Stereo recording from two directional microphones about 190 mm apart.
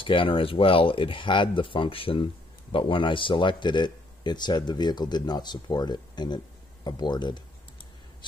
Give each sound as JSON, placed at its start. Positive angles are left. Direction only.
{"t": 0.0, "sound": "speech", "side_deg": 25}